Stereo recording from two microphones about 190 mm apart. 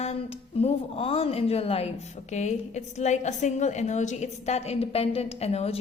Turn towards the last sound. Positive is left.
turn(degrees=35)  # may be behind; listen again after turning